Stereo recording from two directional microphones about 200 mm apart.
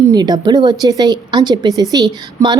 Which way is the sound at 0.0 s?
20° right (ahead or behind).